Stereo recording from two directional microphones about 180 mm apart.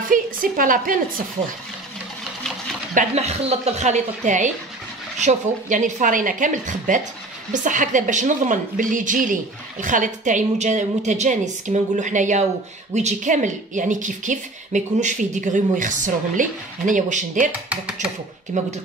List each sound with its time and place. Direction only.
0.1 s a woman's voice: 50° right (ahead or behind)
2.9 s a woman's voice: 40° right (ahead or behind)
17.5 s speech: 5° right (ahead or behind)
18.5 s speech: 40° right (ahead or behind)